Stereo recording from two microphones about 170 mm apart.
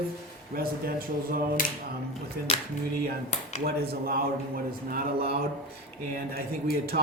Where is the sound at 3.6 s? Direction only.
65° right (ahead or behind).